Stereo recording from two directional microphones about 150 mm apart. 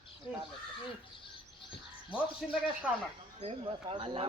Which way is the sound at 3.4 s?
40° right (ahead or behind).